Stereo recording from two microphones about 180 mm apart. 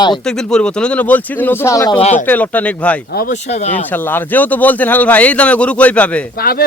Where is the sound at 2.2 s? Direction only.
10° left (ahead or behind).